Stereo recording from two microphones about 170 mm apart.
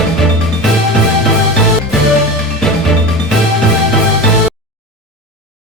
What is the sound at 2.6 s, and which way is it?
Music, centre (ahead or behind).